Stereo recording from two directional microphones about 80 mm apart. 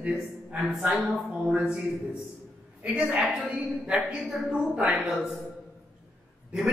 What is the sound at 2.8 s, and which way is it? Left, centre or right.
A man's voice, centre.